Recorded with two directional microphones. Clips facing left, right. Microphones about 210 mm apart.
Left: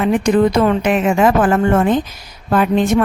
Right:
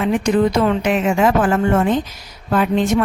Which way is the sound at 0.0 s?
55° left (ahead or behind).